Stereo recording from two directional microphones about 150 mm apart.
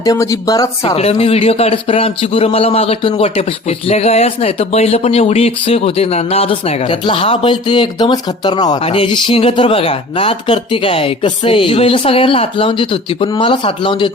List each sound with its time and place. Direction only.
0.0 s speech: 25° left (ahead or behind)
0.9 s speech: 40° left (ahead or behind)